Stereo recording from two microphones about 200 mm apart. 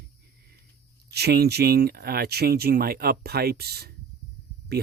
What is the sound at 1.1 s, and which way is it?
Speech, 50° right (ahead or behind).